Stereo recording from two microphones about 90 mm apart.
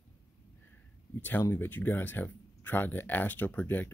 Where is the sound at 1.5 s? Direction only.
20° left (ahead or behind).